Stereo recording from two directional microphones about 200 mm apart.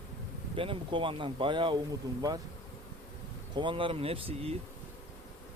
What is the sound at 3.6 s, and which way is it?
Speech, 25° right (ahead or behind).